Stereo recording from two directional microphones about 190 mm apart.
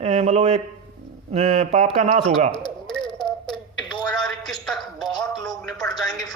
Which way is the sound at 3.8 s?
25° left (ahead or behind).